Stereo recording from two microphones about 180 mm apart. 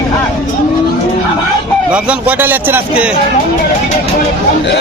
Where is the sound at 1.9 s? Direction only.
10° right (ahead or behind).